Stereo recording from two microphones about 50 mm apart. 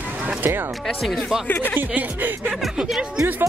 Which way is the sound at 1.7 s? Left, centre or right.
Right.